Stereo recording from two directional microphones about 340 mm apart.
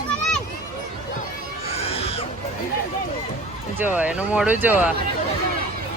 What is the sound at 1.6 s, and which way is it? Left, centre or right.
Children shouting, centre.